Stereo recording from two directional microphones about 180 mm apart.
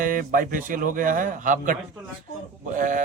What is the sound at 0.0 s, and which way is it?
A man's voice, 50° right (ahead or behind).